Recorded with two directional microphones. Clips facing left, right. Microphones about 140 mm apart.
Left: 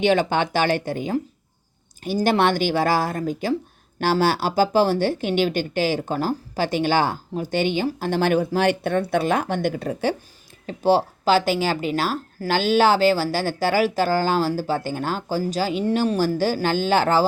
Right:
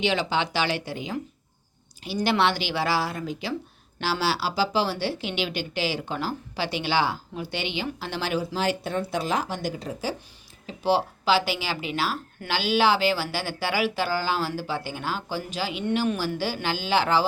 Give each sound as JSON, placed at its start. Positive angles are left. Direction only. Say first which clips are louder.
{"t": 0.0, "sound": "speech", "louder": "left 6 dB", "side_deg": 50}
{"t": 2.2, "sound": "speech", "louder": "left 4 dB", "side_deg": 45}
{"t": 10.7, "sound": "speech", "louder": "left 5 dB", "side_deg": 45}